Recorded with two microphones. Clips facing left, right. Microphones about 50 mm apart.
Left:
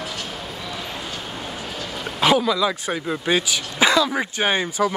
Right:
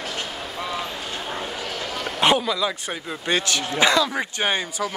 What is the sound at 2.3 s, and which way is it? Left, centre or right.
Speech, centre.